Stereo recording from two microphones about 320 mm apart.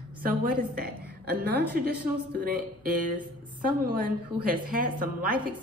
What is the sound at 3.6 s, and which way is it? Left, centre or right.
Speech, right.